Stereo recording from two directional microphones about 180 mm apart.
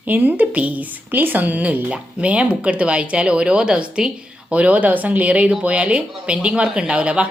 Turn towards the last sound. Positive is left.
turn(degrees=-5)  # may be behind; listen again after turning